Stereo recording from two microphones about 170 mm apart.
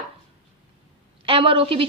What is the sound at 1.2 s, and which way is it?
Speech, 35° right (ahead or behind).